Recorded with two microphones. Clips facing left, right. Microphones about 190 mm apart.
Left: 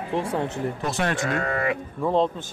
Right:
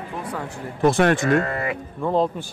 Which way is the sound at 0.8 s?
50° right (ahead or behind).